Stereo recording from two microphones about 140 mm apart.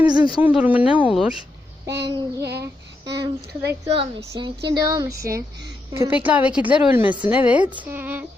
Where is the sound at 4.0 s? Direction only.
35° right (ahead or behind); by 8.2 s 15° right (ahead or behind).